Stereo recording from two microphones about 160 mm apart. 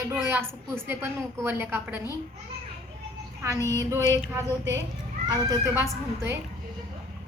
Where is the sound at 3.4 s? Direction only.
20° right (ahead or behind).